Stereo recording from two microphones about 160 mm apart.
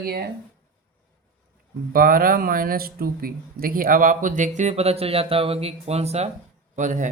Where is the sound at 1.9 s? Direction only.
65° right (ahead or behind).